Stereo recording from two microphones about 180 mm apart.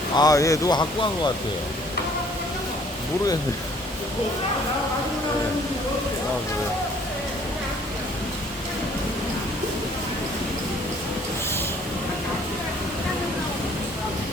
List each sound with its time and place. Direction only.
0.2 s speech: 20° left (ahead or behind)